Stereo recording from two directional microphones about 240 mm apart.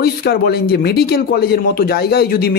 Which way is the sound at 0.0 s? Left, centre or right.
Left.